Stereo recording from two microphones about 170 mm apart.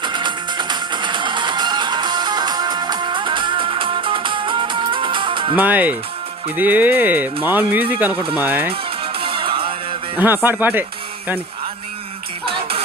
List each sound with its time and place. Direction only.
0.0 s music: 25° right (ahead or behind)
5.5 s speech: 10° right (ahead or behind)
8.7 s music: 30° right (ahead or behind)
10.2 s speech: 10° right (ahead or behind)
12.5 s music: 30° right (ahead or behind)